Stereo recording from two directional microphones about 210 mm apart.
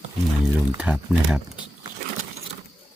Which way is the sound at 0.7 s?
5° right (ahead or behind).